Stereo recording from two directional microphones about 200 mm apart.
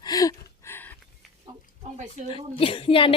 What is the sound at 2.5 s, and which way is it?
Speech, 25° left (ahead or behind).